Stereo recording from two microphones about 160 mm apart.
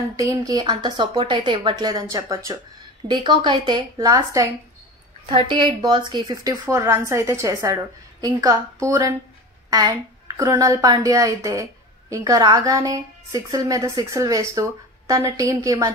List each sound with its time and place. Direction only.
0.1 s a woman's voice: 20° right (ahead or behind)
6.6 s a woman's voice: 15° right (ahead or behind)